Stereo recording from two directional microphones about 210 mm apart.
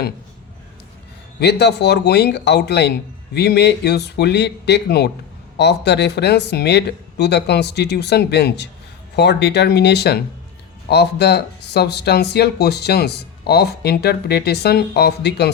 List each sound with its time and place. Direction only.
1.4 s speech: 50° left (ahead or behind)